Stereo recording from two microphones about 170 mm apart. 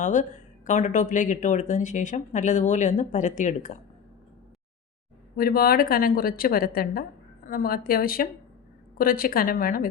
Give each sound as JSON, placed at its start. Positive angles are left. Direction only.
{"t": 0.0, "sound": "speech", "side_deg": 50}
{"t": 5.4, "sound": "a woman's voice", "side_deg": 60}